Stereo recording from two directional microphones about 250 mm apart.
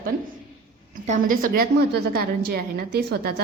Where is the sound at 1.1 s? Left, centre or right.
Right.